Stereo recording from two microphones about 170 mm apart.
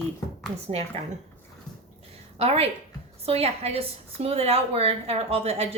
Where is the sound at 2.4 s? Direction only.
35° right (ahead or behind).